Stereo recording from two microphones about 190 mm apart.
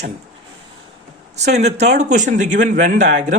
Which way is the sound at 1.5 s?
35° right (ahead or behind).